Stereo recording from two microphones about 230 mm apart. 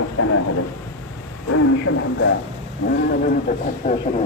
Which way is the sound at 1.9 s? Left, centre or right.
Left.